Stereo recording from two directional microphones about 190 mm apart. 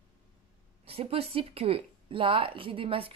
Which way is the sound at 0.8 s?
30° right (ahead or behind).